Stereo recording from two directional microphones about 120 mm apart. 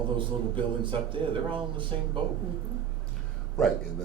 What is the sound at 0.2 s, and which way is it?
A man's voice, 45° right (ahead or behind).